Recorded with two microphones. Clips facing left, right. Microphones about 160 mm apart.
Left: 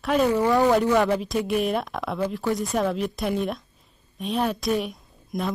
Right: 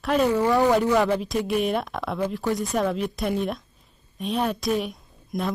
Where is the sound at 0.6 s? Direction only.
Centre (ahead or behind).